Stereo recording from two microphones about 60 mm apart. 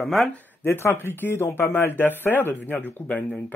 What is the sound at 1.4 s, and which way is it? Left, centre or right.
Speech, left.